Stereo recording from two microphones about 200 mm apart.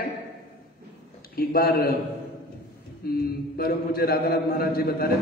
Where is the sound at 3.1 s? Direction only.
50° left (ahead or behind).